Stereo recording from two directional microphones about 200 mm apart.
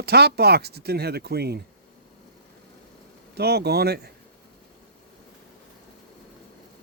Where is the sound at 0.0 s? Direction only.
55° right (ahead or behind).